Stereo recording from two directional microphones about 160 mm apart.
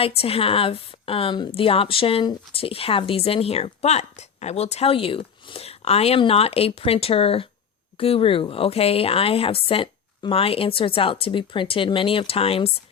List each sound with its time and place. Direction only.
0.2 s a woman's voice: 35° left (ahead or behind)